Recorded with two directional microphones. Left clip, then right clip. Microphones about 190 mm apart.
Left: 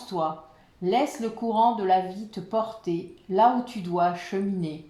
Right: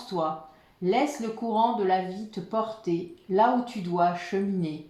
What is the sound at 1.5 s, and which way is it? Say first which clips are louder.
Speech: left 3 dB; 35° left (ahead or behind).